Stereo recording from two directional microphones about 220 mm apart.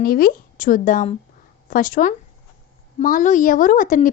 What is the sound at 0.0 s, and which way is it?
Speech, 40° left (ahead or behind).